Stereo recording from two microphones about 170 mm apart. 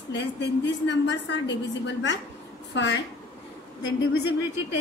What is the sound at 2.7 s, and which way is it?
Speech, 90° left.